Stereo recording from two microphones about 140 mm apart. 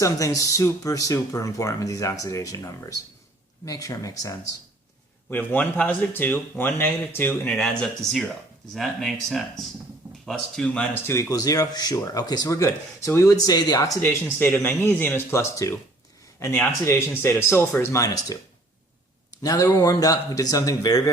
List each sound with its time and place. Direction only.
0.0 s speech: 25° left (ahead or behind)
5.3 s speech: 10° left (ahead or behind)
7.5 s speech: 5° left (ahead or behind)
11.0 s speech: 20° left (ahead or behind)
19.4 s speech: 25° left (ahead or behind)